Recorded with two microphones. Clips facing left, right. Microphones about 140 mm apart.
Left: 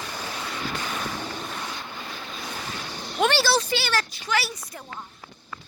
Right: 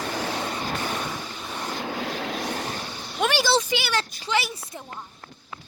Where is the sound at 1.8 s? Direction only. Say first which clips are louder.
Right 8 dB; 75° right (ahead or behind).